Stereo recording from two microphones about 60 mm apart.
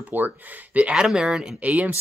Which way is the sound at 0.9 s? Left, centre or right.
Centre.